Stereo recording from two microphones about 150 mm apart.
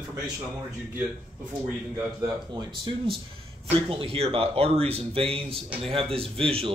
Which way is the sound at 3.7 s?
40° right (ahead or behind).